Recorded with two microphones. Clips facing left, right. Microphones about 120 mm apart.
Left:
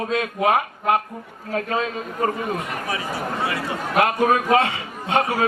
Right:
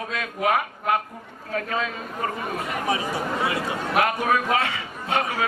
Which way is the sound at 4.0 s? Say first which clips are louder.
Left 4 dB; 35° left (ahead or behind).